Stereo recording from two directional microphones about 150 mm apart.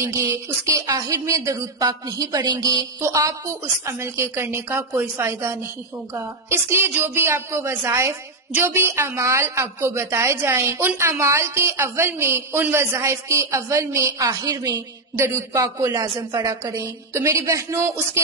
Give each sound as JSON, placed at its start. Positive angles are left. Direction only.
{"t": 0.0, "sound": "a woman's voice", "side_deg": -20}